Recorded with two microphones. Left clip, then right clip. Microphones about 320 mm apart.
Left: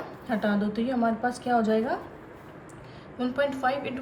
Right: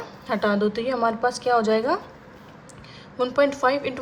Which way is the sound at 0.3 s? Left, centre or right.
Right.